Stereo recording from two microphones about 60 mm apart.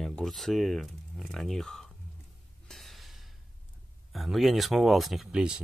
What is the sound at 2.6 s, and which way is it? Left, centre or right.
Gasp, centre.